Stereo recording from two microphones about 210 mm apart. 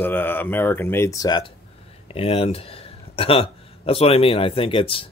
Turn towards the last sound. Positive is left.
turn(degrees=25)  # may be behind; listen again after turning